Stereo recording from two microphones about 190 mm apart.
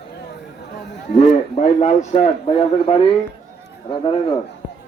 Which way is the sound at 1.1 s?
40° left (ahead or behind).